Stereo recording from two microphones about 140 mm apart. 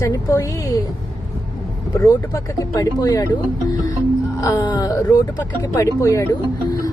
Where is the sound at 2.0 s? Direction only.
25° left (ahead or behind).